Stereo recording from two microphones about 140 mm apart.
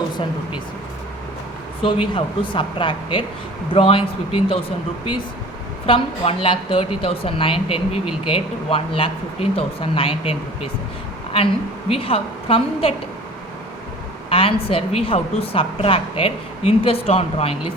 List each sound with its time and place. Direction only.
1.8 s a woman's voice: 35° left (ahead or behind)
5.8 s a woman's voice: 40° left (ahead or behind)
14.3 s a woman's voice: 40° left (ahead or behind)